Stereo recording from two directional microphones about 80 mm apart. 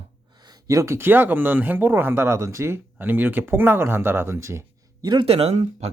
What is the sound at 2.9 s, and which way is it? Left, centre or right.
Speech, right.